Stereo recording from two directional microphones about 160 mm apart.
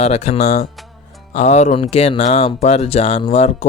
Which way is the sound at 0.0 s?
40° left (ahead or behind).